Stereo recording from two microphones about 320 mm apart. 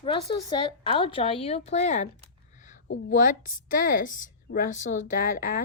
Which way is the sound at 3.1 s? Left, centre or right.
Left.